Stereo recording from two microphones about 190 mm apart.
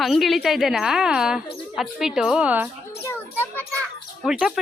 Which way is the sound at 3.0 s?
10° left (ahead or behind).